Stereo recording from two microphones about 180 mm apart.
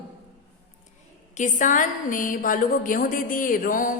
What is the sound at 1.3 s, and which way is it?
A woman's voice, 45° left (ahead or behind).